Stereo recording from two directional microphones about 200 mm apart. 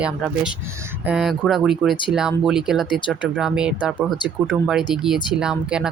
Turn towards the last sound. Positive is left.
turn(degrees=-5)  # may be behind; listen again after turning